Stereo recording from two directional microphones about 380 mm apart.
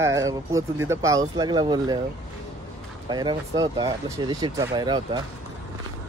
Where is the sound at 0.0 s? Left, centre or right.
Centre.